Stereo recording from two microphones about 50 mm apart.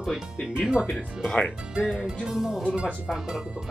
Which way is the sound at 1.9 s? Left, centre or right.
Centre.